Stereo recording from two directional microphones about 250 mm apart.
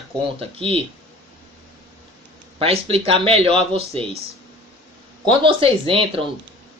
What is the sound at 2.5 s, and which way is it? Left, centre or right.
Speech, right.